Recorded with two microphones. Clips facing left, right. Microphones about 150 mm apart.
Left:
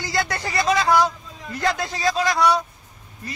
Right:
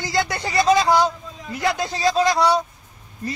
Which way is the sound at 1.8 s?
30° right (ahead or behind).